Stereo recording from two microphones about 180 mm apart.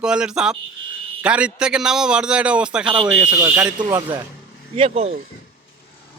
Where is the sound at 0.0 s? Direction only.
5° right (ahead or behind).